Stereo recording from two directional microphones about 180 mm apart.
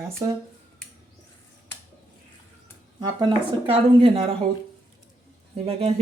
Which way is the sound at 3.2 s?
30° right (ahead or behind).